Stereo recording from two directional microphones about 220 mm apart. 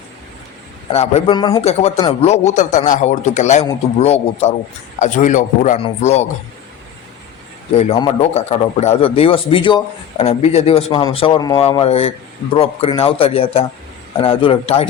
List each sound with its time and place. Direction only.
0.9 s a man's voice: 25° left (ahead or behind)
7.7 s a man's voice: 25° left (ahead or behind)